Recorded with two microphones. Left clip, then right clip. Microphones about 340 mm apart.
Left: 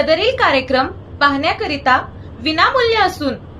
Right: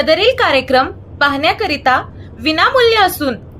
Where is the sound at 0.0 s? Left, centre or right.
Right.